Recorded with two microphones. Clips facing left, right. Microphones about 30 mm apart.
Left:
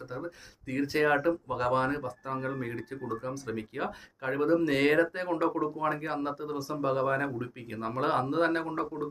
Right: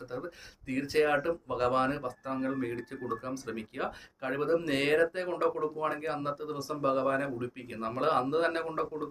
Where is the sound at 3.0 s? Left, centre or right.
Centre.